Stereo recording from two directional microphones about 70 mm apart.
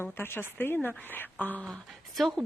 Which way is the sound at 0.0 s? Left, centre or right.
Left.